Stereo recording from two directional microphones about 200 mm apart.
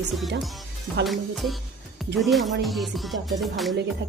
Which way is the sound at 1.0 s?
Centre (ahead or behind).